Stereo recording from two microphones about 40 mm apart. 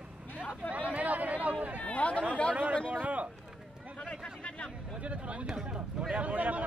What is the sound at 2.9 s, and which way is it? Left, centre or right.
Speech, right.